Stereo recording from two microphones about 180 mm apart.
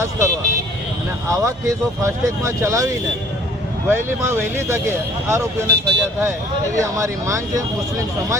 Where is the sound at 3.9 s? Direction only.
15° right (ahead or behind).